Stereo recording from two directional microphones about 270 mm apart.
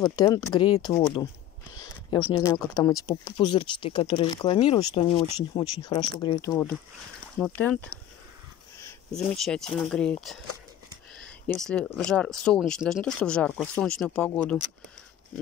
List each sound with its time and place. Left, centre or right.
0.1 s speech: centre
2.3 s speech: centre
9.1 s speech: centre
11.4 s speech: centre